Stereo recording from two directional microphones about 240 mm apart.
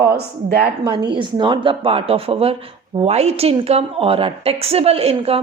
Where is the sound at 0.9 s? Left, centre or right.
Centre.